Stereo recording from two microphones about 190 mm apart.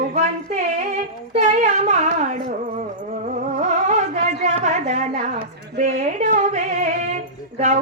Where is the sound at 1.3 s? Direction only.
35° right (ahead or behind).